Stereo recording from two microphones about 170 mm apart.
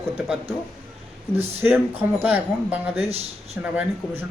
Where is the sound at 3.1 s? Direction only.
35° right (ahead or behind).